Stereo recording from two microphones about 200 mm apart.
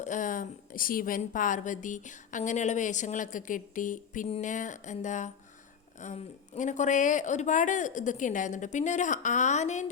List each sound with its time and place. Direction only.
0.0 s a woman's voice: 40° left (ahead or behind)